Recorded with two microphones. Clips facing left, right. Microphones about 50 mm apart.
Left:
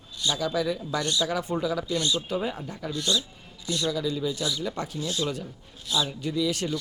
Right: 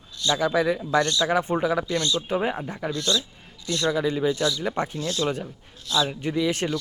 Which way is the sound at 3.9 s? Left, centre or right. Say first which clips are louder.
Right 7 dB; right.